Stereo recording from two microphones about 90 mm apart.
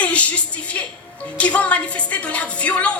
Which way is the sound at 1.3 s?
15° left (ahead or behind).